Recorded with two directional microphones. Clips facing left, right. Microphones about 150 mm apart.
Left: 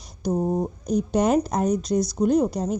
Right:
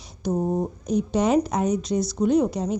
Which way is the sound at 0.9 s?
45° left (ahead or behind).